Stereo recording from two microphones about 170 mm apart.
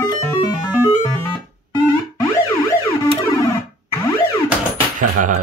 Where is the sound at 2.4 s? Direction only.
25° left (ahead or behind).